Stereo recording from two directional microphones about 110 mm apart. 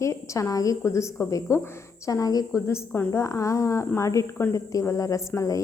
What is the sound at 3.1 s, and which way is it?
A woman's voice, 30° left (ahead or behind).